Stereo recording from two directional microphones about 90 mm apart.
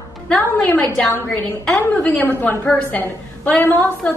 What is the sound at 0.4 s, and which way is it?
Speech, 20° left (ahead or behind).